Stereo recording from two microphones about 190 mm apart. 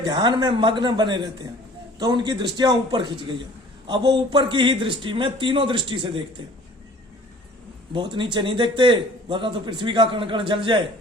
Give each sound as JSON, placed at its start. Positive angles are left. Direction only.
{"t": 0.0, "sound": "a man's voice", "side_deg": -25}
{"t": 7.9, "sound": "a man's voice", "side_deg": -25}